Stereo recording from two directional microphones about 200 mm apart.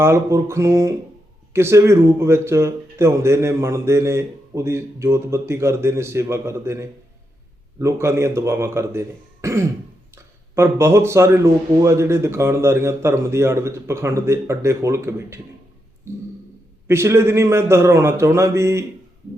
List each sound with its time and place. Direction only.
0.0 s speech: 15° right (ahead or behind)